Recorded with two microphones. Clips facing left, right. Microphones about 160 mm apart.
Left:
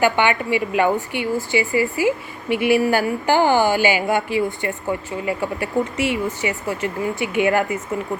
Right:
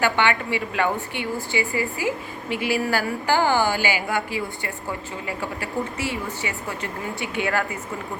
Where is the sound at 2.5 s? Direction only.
20° left (ahead or behind).